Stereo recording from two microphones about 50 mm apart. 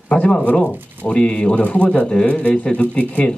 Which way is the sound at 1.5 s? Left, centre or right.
Left.